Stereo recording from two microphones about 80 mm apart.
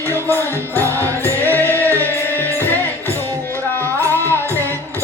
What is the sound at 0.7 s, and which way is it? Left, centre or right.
Music, left.